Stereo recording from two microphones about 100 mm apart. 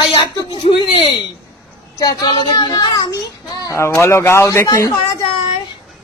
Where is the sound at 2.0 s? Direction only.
40° left (ahead or behind).